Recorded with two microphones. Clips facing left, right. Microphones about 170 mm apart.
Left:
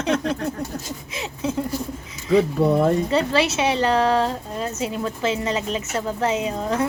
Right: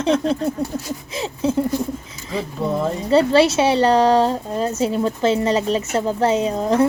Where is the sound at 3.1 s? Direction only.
30° right (ahead or behind).